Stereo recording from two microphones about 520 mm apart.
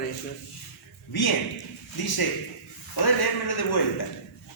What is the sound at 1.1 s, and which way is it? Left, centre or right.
Speech, left.